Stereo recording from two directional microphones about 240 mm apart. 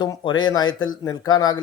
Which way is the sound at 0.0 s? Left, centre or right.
Centre.